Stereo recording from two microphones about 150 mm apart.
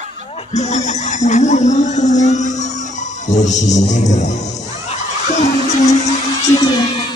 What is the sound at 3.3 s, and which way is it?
Music, 55° left (ahead or behind).